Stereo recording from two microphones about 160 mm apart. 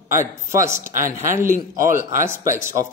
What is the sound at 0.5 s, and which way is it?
Speech, 15° right (ahead or behind).